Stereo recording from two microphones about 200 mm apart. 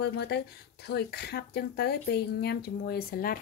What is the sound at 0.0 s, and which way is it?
Speech, 55° left (ahead or behind).